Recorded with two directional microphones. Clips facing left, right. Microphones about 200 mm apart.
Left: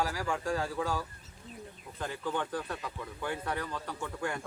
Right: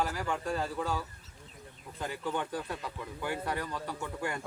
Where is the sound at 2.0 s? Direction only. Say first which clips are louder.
Even; 10° right (ahead or behind).